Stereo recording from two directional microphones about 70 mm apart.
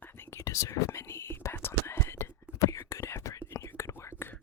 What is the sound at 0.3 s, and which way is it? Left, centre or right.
Whispering, left.